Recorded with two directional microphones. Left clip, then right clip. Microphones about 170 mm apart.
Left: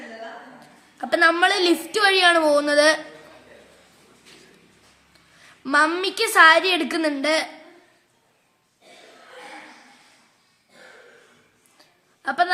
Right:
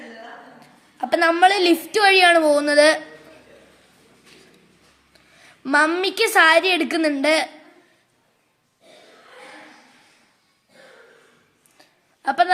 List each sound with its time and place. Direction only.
0.6 s a woman's voice: 15° right (ahead or behind)
5.4 s a woman's voice: 20° right (ahead or behind)
11.8 s a sound: 20° right (ahead or behind)